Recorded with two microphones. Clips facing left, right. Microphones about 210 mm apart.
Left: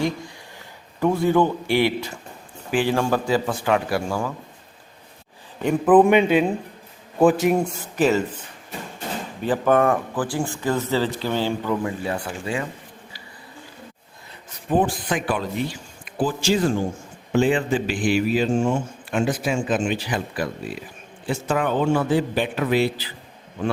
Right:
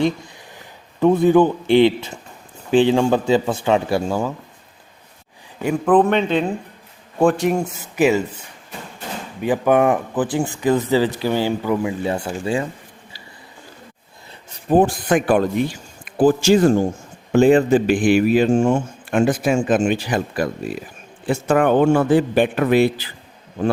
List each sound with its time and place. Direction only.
0.9 s a man's voice: 20° right (ahead or behind)
5.6 s a man's voice: 5° left (ahead or behind)
12.0 s a man's voice: 25° right (ahead or behind)
14.7 s speech: 45° right (ahead or behind)